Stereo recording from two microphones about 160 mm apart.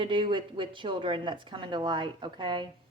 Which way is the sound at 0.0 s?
30° right (ahead or behind).